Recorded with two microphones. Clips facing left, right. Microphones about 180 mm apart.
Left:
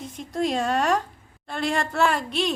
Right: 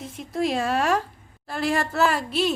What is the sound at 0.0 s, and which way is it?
A woman's voice, centre (ahead or behind).